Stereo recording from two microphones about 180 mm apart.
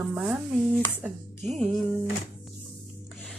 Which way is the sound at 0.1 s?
10° right (ahead or behind).